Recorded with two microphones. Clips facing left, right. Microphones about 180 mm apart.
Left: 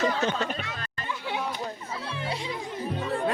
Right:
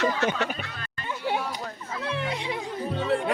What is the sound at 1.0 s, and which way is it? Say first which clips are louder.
Chatter: right 3 dB; 45° right (ahead or behind).